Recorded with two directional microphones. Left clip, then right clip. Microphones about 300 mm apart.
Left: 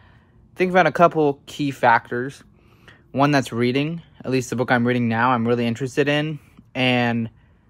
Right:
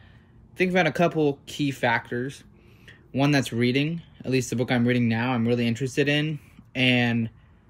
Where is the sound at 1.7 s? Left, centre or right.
Centre.